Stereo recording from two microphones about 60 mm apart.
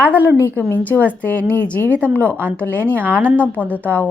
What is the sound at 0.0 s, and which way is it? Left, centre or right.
Speech, right.